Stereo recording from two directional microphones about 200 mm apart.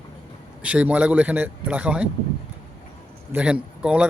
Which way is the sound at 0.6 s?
5° right (ahead or behind).